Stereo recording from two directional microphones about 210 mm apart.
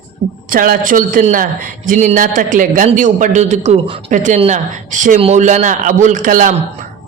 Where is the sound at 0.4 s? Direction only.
40° right (ahead or behind).